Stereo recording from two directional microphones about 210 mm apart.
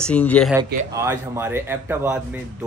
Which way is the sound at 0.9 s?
10° right (ahead or behind).